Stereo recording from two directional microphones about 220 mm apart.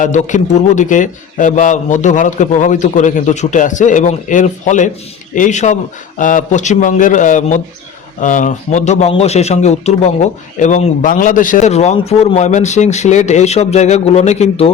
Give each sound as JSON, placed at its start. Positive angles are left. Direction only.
{"t": 0.0, "sound": "a man's voice", "side_deg": 35}